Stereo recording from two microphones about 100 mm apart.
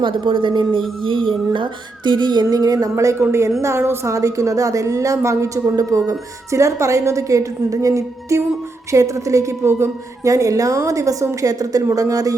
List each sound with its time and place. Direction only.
0.0 s a woman's voice: 60° right (ahead or behind); by 12.4 s 35° right (ahead or behind)